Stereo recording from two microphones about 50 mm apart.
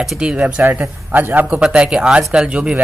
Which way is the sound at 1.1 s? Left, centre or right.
Right.